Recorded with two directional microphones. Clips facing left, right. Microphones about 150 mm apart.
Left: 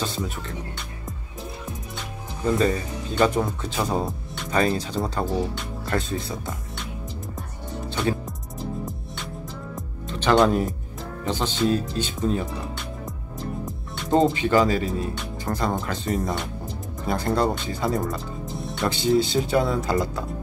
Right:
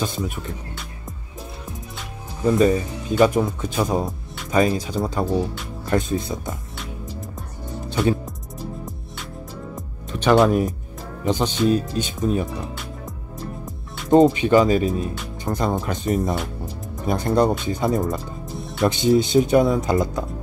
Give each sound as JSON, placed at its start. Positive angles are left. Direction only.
{"t": 2.0, "sound": "music", "side_deg": 0}
{"t": 2.6, "sound": "speech", "side_deg": -15}
{"t": 5.9, "sound": "speech", "side_deg": -15}
{"t": 10.3, "sound": "speech", "side_deg": -15}
{"t": 14.1, "sound": "speech", "side_deg": -20}
{"t": 18.5, "sound": "music", "side_deg": 0}
{"t": 18.9, "sound": "speech", "side_deg": -20}